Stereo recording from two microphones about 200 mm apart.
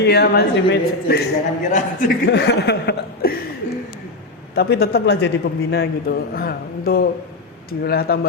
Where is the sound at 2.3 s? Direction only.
55° left (ahead or behind).